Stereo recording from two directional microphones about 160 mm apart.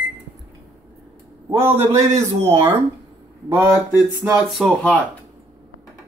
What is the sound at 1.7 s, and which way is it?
Speech, 45° right (ahead or behind).